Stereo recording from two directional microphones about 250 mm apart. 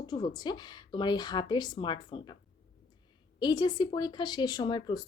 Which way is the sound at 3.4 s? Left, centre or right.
Centre.